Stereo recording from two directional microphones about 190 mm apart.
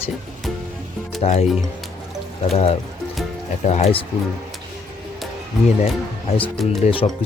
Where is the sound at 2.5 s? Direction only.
35° left (ahead or behind).